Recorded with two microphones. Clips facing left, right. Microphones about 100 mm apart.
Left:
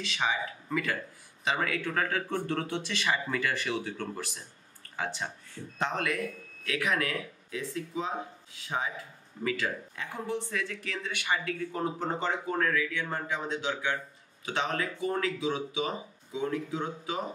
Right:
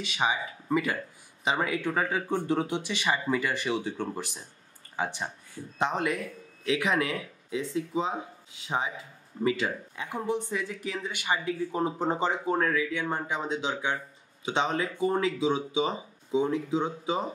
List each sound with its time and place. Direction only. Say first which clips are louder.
0.0 s speech: right 2 dB; 10° right (ahead or behind)